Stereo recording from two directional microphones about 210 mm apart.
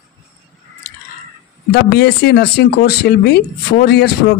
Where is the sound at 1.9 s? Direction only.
50° left (ahead or behind).